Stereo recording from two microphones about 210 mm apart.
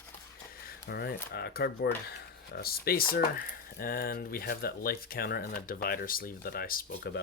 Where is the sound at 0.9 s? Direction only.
50° left (ahead or behind).